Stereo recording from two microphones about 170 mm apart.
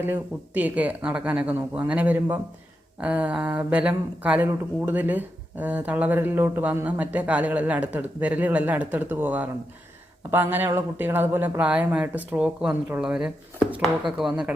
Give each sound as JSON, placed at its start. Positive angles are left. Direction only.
{"t": 0.0, "sound": "speech", "side_deg": -10}